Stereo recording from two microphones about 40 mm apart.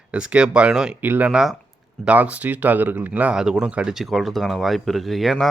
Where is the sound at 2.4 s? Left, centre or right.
Right.